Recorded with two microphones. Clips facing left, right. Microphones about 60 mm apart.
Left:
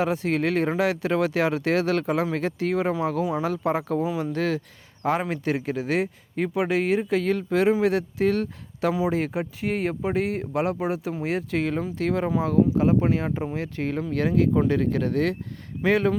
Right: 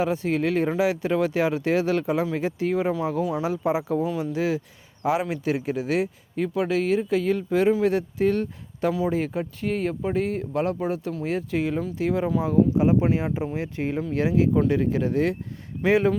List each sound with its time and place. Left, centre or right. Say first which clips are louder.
0.0 s speech: even; centre
4.0 s speech: even; centre
4.3 s speech: even; centre
14.1 s speech: even; centre